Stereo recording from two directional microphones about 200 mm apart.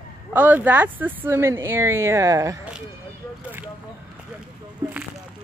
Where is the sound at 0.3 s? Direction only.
10° right (ahead or behind).